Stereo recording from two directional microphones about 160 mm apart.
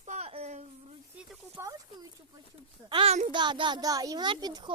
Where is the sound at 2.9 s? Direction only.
35° right (ahead or behind).